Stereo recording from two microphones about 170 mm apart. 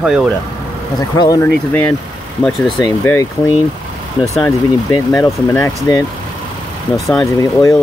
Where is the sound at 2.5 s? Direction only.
Centre (ahead or behind).